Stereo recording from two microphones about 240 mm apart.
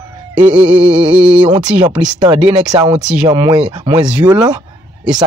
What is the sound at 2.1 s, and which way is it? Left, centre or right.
Speech, centre.